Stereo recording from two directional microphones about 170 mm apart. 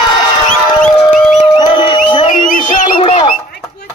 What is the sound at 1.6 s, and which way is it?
Music, 25° left (ahead or behind).